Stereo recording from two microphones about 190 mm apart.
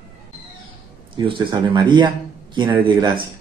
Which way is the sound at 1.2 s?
25° right (ahead or behind).